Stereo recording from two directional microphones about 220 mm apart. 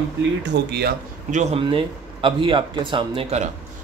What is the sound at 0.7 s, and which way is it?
Speech, 45° right (ahead or behind).